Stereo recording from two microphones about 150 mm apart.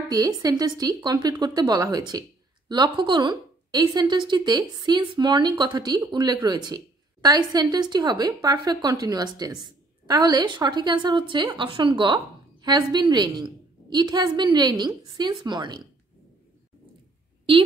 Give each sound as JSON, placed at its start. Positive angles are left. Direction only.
{"t": 0.1, "sound": "a woman's voice", "side_deg": -25}